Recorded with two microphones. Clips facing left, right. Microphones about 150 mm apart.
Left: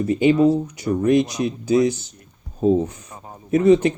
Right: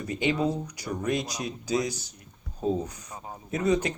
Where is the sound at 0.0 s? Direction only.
25° left (ahead or behind).